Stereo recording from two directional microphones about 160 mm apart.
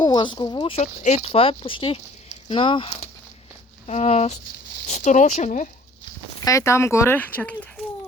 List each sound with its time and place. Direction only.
0.0 s speech: 25° left (ahead or behind)
0.8 s speech: 45° left (ahead or behind)
6.4 s speech: 20° left (ahead or behind)